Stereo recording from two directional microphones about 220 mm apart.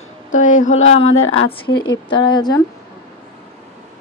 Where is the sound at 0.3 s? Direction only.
35° left (ahead or behind).